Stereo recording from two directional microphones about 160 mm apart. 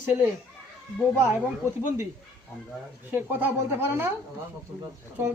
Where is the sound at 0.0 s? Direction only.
15° right (ahead or behind).